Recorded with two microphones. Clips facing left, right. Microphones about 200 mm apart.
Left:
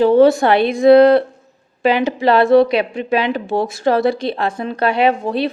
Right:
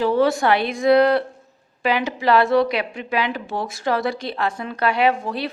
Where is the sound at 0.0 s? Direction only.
25° left (ahead or behind).